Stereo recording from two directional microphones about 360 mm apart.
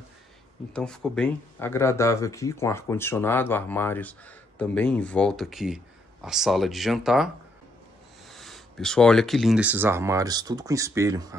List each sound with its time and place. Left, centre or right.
0.7 s speech: centre
8.3 s speech: centre